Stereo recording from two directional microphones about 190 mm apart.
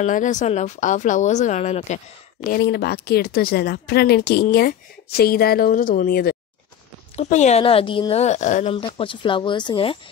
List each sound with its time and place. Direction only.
0.0 s speech: 40° left (ahead or behind)
2.5 s speech: 60° left (ahead or behind)
7.2 s speech: 40° left (ahead or behind)
8.7 s speech: 25° left (ahead or behind)